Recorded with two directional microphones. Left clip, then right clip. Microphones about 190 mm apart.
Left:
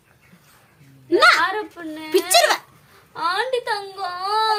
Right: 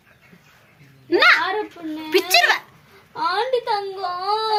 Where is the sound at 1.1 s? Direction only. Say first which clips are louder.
Even; 30° left (ahead or behind).